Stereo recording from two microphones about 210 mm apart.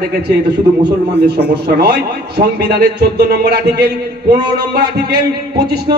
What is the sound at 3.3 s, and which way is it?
Speech, 50° right (ahead or behind).